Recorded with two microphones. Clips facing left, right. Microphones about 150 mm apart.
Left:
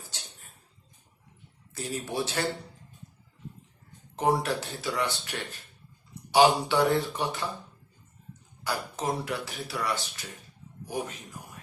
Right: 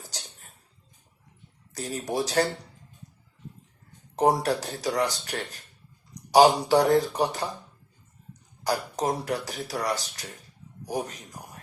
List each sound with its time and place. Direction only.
0.0 s a sound: 40° right (ahead or behind)
1.7 s speech: 40° right (ahead or behind)
4.1 s speech: 40° right (ahead or behind)